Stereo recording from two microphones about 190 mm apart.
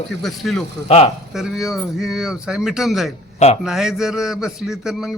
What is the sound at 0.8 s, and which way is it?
Speech, 35° left (ahead or behind).